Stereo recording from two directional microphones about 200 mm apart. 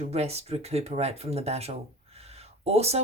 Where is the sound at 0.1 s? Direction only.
30° right (ahead or behind).